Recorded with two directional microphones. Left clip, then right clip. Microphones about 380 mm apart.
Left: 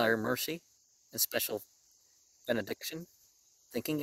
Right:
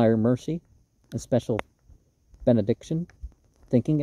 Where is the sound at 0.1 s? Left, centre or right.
Centre.